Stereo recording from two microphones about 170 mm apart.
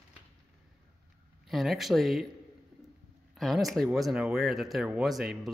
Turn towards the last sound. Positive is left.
turn(degrees=0)  # may be behind; listen again after turning